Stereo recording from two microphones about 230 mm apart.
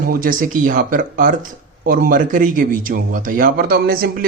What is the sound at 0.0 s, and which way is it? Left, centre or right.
A man's voice, right.